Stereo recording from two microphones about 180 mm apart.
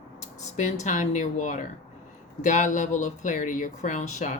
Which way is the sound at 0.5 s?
40° left (ahead or behind).